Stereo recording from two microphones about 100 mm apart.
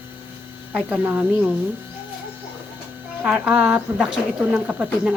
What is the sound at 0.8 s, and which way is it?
Speech, 15° right (ahead or behind).